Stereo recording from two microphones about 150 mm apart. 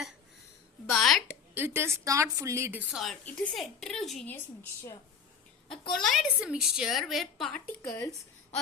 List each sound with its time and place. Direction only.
0.9 s a woman's voice: centre (ahead or behind)
1.5 s a woman's voice: 15° right (ahead or behind)
2.9 s a woman's voice: centre (ahead or behind)
5.9 s a woman's voice: centre (ahead or behind)
7.9 s speech: 20° left (ahead or behind)